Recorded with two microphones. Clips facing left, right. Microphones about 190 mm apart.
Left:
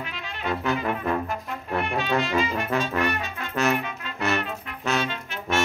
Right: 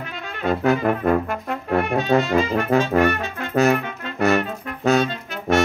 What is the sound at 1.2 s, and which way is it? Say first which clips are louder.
Brass instrument: right 5 dB; 65° right (ahead or behind).